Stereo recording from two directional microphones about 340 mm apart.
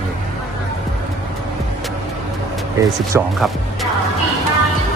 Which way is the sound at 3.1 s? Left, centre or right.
Centre.